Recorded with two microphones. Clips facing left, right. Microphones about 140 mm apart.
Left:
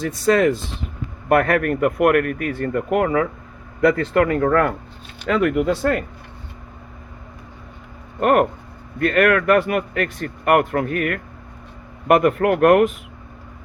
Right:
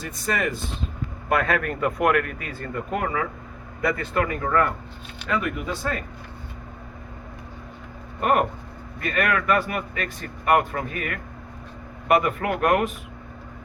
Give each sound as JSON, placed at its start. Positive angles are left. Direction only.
{"t": 0.0, "sound": "speech", "side_deg": 90}
{"t": 1.3, "sound": "speech", "side_deg": 60}
{"t": 5.3, "sound": "speech", "side_deg": 85}
{"t": 8.2, "sound": "speech", "side_deg": 65}